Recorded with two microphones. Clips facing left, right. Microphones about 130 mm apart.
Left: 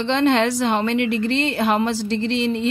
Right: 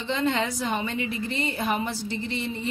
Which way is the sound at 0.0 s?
75° left (ahead or behind).